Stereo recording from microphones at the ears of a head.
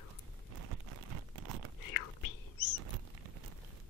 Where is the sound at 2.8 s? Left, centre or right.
Right.